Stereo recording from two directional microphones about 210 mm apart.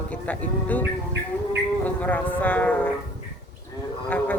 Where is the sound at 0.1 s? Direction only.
5° left (ahead or behind).